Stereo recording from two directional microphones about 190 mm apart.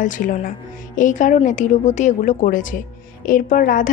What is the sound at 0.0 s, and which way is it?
A woman's voice, 45° left (ahead or behind).